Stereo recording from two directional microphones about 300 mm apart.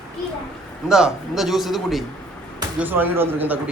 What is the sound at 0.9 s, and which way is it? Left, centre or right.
A man's voice, centre.